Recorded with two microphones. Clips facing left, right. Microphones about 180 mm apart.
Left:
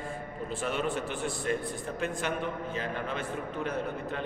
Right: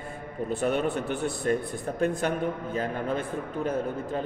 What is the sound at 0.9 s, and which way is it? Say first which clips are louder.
Speech: right 4 dB; 60° right (ahead or behind).